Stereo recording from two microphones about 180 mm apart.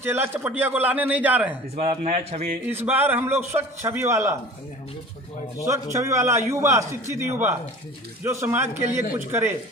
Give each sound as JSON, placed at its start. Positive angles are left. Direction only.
{"t": 0.0, "sound": "a man's voice", "side_deg": -15}
{"t": 1.7, "sound": "speech", "side_deg": -35}
{"t": 2.6, "sound": "a man's voice", "side_deg": -10}
{"t": 5.6, "sound": "a man's voice", "side_deg": -15}